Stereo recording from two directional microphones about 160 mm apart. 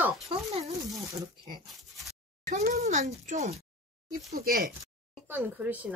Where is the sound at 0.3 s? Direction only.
40° right (ahead or behind).